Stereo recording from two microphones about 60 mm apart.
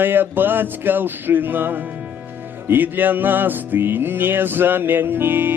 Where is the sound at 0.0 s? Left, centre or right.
Right.